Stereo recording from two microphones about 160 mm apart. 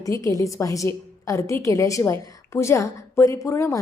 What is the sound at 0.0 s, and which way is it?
A woman's voice, 20° left (ahead or behind).